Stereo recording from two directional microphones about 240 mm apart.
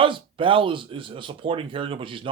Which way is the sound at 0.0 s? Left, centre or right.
Right.